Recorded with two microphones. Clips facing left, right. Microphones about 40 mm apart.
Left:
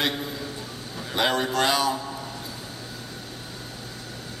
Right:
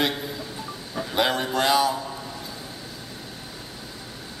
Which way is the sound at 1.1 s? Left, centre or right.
Centre.